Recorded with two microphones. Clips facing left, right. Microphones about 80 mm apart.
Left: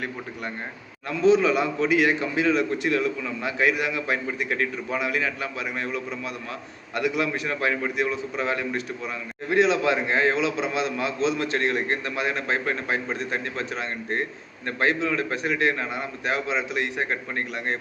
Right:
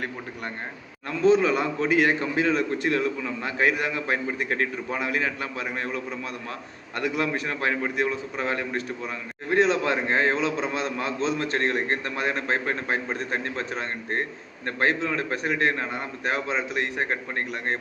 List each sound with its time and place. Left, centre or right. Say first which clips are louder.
1.2 s a man's voice: left 1 dB; right